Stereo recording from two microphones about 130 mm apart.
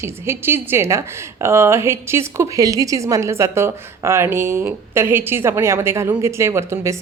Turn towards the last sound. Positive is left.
turn(degrees=-20)  # may be behind; listen again after turning